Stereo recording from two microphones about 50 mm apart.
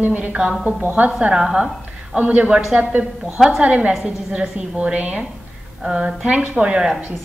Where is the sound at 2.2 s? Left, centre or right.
Right.